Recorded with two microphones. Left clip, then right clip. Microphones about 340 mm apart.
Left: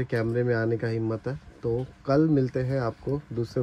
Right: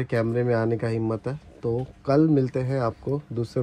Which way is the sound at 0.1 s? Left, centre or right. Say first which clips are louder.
Right 3 dB; right.